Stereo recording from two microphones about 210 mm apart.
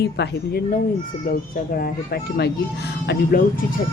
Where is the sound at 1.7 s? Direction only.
45° left (ahead or behind).